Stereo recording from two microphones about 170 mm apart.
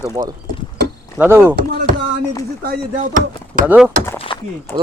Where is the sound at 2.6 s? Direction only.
50° right (ahead or behind).